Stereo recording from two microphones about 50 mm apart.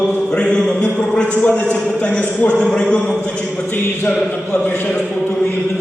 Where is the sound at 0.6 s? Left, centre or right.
Centre.